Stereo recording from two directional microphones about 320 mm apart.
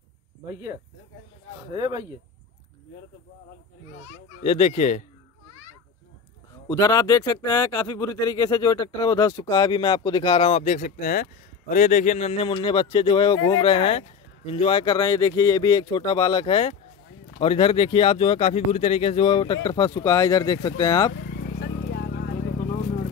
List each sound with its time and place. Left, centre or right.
1.8 s speech: centre
4.4 s speech: centre
6.7 s speech: centre
21.1 s vehicle: left